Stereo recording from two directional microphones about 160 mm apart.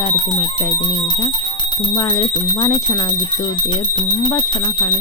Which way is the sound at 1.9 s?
25° left (ahead or behind).